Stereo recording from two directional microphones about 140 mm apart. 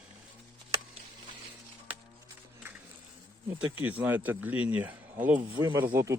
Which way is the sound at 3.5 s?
15° right (ahead or behind).